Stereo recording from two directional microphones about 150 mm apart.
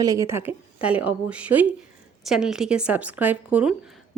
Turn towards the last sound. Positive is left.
turn(degrees=-10)  # may be behind; listen again after turning